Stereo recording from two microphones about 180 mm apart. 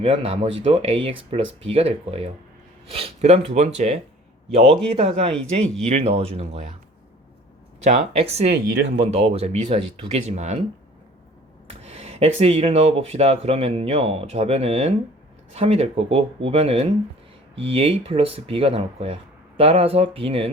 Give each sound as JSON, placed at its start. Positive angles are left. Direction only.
{"t": 0.0, "sound": "speech", "side_deg": -30}
{"t": 7.9, "sound": "speech", "side_deg": -35}
{"t": 11.7, "sound": "speech", "side_deg": -35}